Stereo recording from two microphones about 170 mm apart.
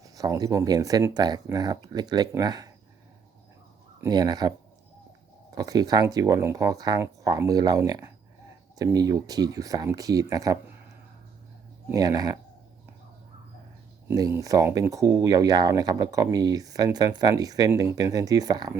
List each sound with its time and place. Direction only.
0.0 s speech: 20° right (ahead or behind)
4.0 s speech: 25° right (ahead or behind)
5.5 s speech: 20° right (ahead or behind)
11.9 s speech: 20° right (ahead or behind)
14.1 s speech: 20° right (ahead or behind)